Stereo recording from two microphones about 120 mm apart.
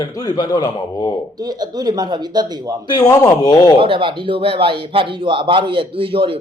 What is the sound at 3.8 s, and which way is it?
Speech, 45° right (ahead or behind).